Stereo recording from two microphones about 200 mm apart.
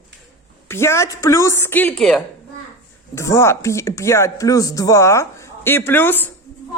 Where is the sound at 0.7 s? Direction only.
15° left (ahead or behind).